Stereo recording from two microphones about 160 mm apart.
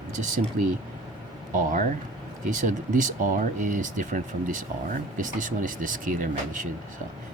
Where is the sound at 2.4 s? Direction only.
55° right (ahead or behind).